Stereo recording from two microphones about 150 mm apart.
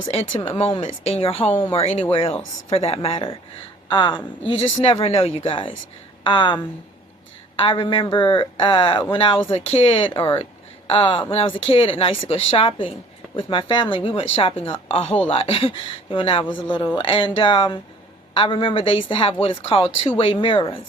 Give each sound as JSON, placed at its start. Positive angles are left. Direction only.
{"t": 0.1, "sound": "a woman's voice", "side_deg": 45}
{"t": 7.6, "sound": "a woman's voice", "side_deg": 35}